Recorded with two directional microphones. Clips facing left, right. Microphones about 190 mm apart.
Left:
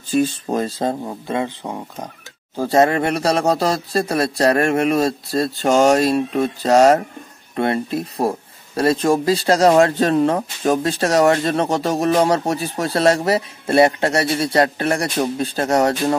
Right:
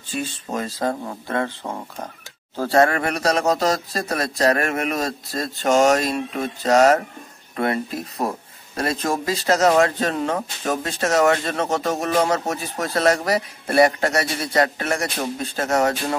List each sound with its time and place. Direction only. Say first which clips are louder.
0.1 s speech: left 9 dB; 35° left (ahead or behind)